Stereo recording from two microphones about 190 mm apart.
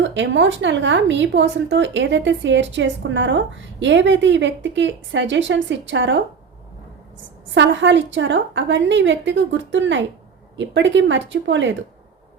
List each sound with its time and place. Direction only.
0.0 s speech: 75° right (ahead or behind)
7.5 s speech: 75° right (ahead or behind)